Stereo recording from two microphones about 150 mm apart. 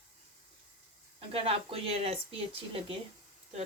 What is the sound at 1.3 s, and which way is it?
Speech, 40° right (ahead or behind).